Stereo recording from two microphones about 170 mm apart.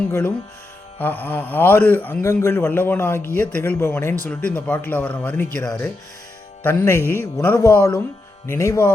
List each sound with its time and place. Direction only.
0.1 s a man's voice: 15° left (ahead or behind)